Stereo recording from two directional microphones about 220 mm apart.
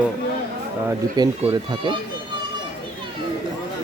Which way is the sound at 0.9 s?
20° right (ahead or behind).